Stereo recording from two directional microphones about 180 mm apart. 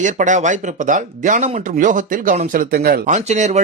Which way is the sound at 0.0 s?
45° right (ahead or behind).